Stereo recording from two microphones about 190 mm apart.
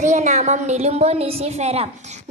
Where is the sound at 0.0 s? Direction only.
40° right (ahead or behind).